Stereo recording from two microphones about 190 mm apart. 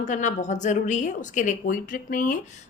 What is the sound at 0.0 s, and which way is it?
A woman's voice, 40° left (ahead or behind).